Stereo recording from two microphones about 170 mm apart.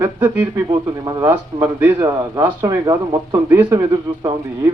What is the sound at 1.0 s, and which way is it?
A man's voice, 25° right (ahead or behind).